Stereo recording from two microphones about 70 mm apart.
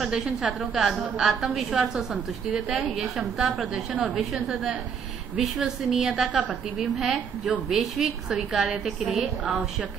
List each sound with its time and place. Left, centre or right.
0.0 s a woman's voice: centre